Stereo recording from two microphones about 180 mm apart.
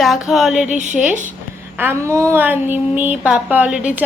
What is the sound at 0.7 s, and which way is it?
Speech, 40° right (ahead or behind).